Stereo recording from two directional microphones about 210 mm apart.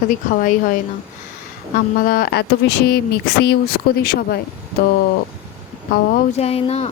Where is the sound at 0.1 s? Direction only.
40° left (ahead or behind).